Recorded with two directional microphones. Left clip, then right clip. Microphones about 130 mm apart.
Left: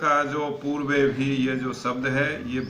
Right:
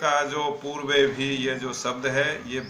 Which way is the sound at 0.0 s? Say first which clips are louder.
Left 1 dB; 20° right (ahead or behind).